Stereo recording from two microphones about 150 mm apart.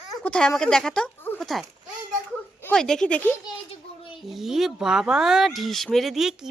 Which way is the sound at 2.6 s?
5° left (ahead or behind).